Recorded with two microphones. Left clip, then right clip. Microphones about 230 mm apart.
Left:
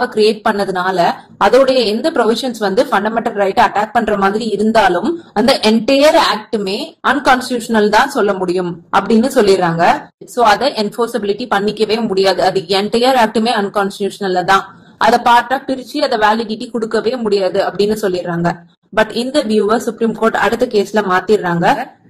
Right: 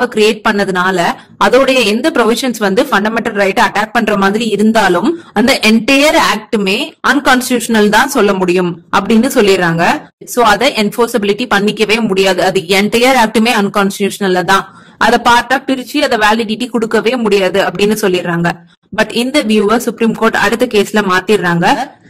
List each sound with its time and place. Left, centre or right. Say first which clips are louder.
0.0 s speech: right 2 dB; right